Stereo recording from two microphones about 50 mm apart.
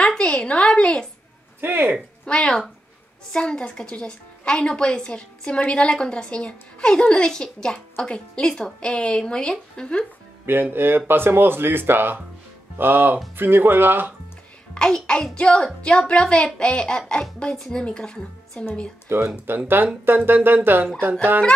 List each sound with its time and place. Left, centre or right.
0.0 s a sound: centre
1.6 s speech: right
2.2 s a woman's voice: centre
10.4 s speech: right
14.7 s a woman's voice: centre
19.0 s speech: right
19.8 s speech: right